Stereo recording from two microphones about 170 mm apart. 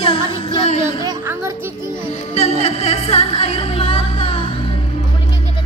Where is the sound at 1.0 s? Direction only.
15° right (ahead or behind).